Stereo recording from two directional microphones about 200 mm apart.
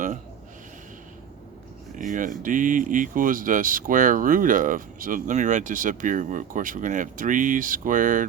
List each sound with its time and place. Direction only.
2.0 s speech: 40° right (ahead or behind)